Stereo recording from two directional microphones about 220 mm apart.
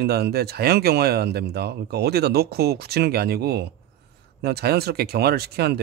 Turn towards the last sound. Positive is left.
turn(degrees=-45)  # may be behind; listen again after turning